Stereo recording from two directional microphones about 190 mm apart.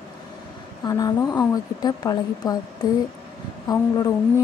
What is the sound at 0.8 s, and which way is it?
Speech, 20° left (ahead or behind).